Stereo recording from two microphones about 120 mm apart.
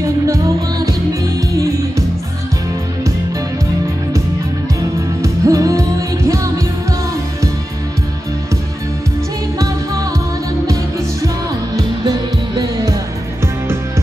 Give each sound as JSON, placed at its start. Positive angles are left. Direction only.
{"t": 0.0, "sound": "music", "side_deg": -25}
{"t": 5.2, "sound": "music", "side_deg": -25}